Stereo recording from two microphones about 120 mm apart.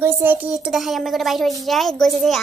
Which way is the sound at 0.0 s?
15° right (ahead or behind).